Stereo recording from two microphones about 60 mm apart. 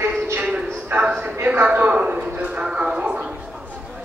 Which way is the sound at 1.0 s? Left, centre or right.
Centre.